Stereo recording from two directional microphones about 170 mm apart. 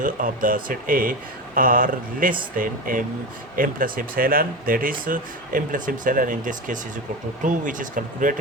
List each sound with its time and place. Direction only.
0.0 s speech: 55° right (ahead or behind)